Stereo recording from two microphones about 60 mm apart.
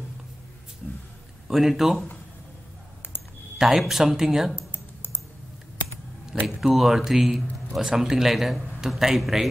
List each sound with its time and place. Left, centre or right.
1.5 s a man's voice: centre
3.5 s a man's voice: centre
4.6 s typing: left
6.4 s a man's voice: centre